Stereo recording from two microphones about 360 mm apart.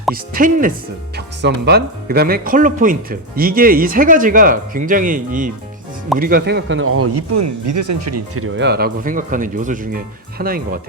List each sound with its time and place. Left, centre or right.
0.1 s speech: right
8.5 s speech: right